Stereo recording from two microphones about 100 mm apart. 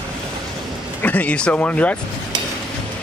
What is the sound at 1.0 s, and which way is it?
Speech, 15° left (ahead or behind).